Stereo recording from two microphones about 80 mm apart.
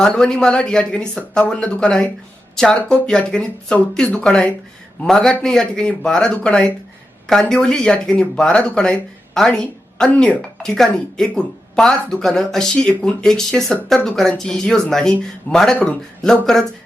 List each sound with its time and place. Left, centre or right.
0.0 s speech: centre